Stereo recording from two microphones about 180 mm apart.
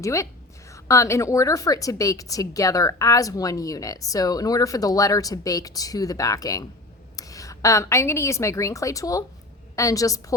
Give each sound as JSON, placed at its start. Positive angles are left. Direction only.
{"t": 0.0, "sound": "a woman's voice", "side_deg": 15}